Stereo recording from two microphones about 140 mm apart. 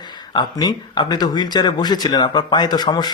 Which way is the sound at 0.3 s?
30° left (ahead or behind).